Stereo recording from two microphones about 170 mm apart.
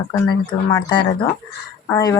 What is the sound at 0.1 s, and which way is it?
Speech, 25° left (ahead or behind).